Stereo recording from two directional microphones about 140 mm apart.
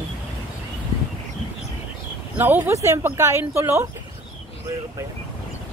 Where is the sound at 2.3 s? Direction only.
15° right (ahead or behind).